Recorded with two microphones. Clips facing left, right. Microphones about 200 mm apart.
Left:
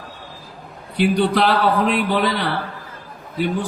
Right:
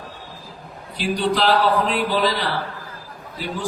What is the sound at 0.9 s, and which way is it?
A man's voice, 60° left (ahead or behind).